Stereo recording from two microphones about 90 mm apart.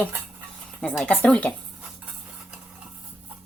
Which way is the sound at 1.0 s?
10° left (ahead or behind).